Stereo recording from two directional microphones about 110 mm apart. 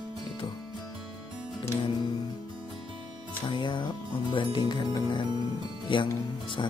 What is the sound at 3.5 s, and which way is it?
Speech, 45° left (ahead or behind).